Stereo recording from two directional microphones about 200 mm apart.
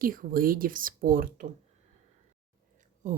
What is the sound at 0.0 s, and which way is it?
Speech, 45° right (ahead or behind).